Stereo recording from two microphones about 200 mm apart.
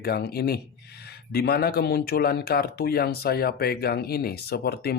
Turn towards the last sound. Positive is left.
turn(degrees=50)  # may be behind; listen again after turning